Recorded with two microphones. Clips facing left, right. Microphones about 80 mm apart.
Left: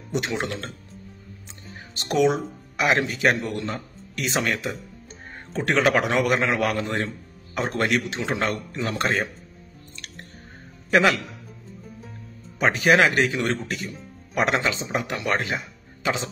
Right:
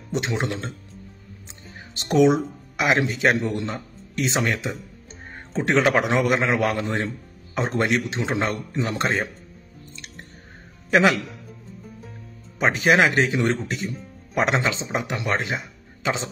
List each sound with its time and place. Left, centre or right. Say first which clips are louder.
0.2 s speech: right 1 dB; centre
2.0 s a man's voice: right 3 dB; right
10.9 s a man's voice: right 1 dB; right
12.5 s speech: even; right